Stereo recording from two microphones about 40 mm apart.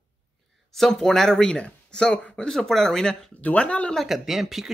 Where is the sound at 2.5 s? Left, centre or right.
Centre.